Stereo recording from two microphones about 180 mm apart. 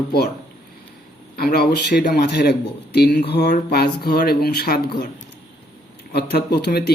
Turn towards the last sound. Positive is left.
turn(degrees=65)  # may be behind; listen again after turning